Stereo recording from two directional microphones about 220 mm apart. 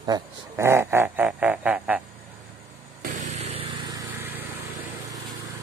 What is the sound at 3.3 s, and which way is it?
Vehicle, 25° right (ahead or behind).